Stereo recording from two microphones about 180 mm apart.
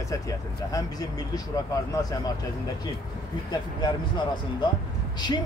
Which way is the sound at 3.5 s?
25° left (ahead or behind).